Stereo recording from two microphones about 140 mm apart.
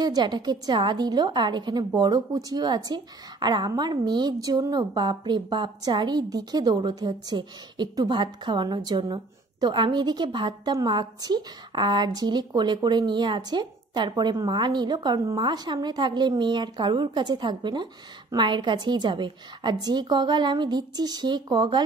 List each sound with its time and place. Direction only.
0.0 s a woman's voice: 30° right (ahead or behind)